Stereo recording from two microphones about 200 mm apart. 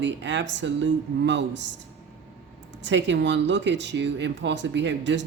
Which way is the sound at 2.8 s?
65° right (ahead or behind).